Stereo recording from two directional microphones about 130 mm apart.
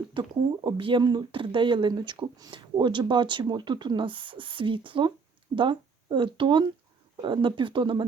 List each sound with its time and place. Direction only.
0.1 s speech: 40° right (ahead or behind)